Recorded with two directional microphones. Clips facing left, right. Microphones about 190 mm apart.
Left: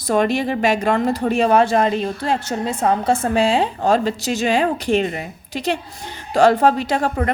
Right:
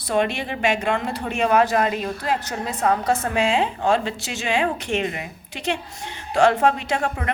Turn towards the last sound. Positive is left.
turn(degrees=40)  # may be behind; listen again after turning